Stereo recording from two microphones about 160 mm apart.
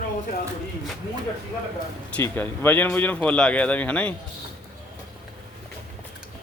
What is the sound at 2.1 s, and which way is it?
Speech, 10° left (ahead or behind).